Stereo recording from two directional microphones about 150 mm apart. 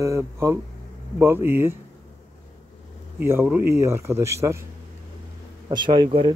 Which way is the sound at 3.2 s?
15° right (ahead or behind).